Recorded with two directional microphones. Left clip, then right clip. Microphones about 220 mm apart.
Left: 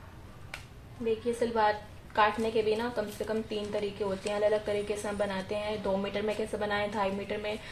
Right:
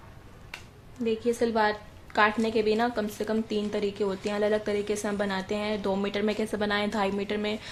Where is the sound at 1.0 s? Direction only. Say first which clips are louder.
Right 3 dB; 50° right (ahead or behind).